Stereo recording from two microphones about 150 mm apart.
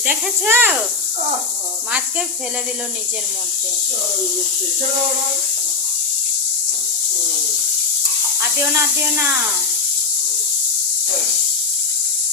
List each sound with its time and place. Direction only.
0.0 s speech: 10° right (ahead or behind)
8.4 s speech: 15° right (ahead or behind)